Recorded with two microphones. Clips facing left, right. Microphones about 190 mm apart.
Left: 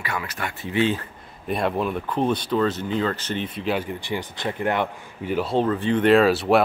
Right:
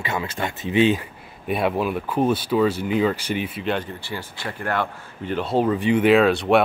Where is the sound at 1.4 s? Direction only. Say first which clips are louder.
Right 2 dB; 5° right (ahead or behind).